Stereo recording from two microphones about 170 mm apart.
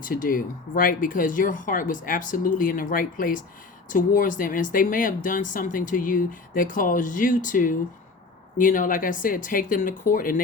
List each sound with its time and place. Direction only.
0.0 s speech: 55° left (ahead or behind)